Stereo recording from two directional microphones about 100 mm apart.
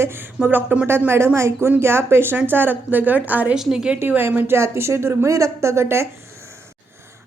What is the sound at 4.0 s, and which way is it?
Speech, 20° right (ahead or behind).